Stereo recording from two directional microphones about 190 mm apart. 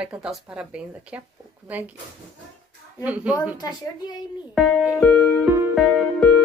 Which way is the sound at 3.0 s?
5° right (ahead or behind).